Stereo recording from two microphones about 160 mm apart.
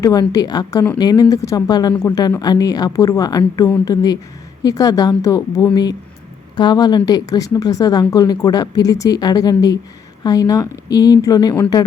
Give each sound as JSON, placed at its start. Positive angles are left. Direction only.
{"t": 0.0, "sound": "speech", "side_deg": 25}